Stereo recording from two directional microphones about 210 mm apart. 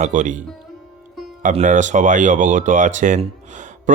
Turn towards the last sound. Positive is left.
turn(degrees=-35)  # may be behind; listen again after turning